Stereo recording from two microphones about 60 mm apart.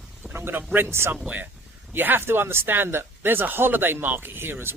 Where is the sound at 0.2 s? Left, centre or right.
Right.